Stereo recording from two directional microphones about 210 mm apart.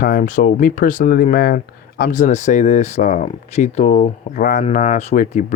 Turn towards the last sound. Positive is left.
turn(degrees=35)  # may be behind; listen again after turning